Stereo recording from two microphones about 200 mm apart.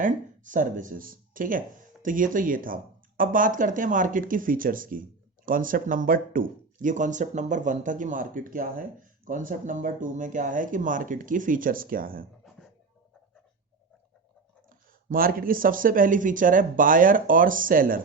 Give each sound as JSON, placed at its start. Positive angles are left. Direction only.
{"t": 0.0, "sound": "speech", "side_deg": -40}
{"t": 14.7, "sound": "speech", "side_deg": -45}